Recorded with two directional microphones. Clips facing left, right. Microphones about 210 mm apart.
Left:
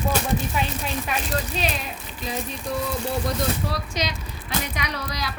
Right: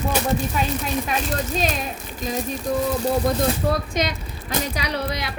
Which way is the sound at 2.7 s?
45° right (ahead or behind).